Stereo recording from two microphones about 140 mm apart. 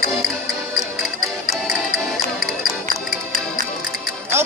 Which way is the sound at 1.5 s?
Centre (ahead or behind).